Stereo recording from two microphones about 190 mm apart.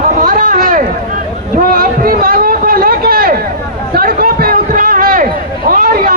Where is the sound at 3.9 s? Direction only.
50° right (ahead or behind).